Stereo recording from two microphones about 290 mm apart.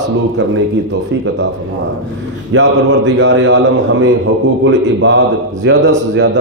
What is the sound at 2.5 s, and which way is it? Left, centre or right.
A man's voice, right.